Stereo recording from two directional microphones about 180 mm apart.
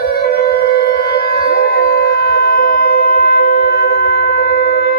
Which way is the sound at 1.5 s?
55° left (ahead or behind).